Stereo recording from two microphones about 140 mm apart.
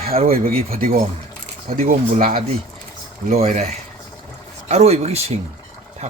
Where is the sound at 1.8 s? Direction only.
80° right.